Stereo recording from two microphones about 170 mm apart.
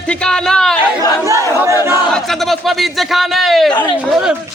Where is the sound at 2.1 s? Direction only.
Centre (ahead or behind).